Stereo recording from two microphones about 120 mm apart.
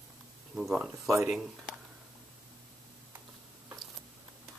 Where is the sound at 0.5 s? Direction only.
5° right (ahead or behind).